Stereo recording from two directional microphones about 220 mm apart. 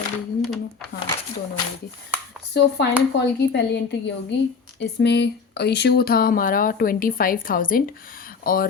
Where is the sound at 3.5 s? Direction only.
50° left (ahead or behind).